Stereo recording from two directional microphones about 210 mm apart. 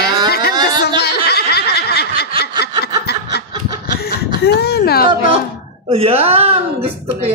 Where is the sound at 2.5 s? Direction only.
20° right (ahead or behind).